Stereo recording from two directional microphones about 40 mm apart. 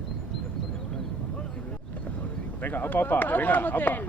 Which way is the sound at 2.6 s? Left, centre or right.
Left.